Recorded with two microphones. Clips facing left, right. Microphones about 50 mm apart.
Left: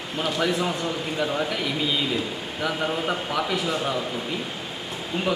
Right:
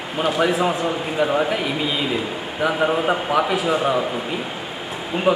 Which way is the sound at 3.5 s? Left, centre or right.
Centre.